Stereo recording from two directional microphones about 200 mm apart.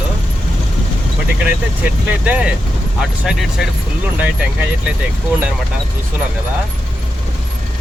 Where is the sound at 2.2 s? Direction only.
5° right (ahead or behind).